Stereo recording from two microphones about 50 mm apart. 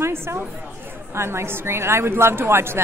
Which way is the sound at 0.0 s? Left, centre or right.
Right.